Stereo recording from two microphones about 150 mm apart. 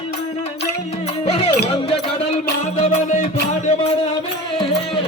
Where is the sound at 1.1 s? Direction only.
40° left (ahead or behind).